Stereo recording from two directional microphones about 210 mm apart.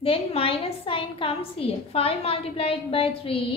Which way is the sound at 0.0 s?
25° left (ahead or behind).